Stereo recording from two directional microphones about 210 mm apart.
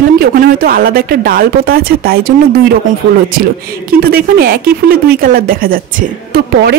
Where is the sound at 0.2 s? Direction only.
45° right (ahead or behind).